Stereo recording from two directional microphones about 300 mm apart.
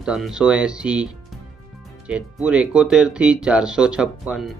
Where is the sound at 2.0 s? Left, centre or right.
Centre.